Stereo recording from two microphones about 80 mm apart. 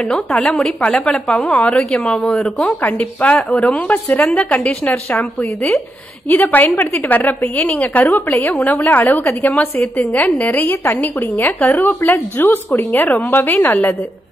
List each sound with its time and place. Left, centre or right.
0.0 s a woman's voice: centre
2.8 s a woman's voice: left